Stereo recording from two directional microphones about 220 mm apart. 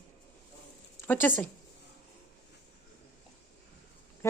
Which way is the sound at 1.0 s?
10° left (ahead or behind).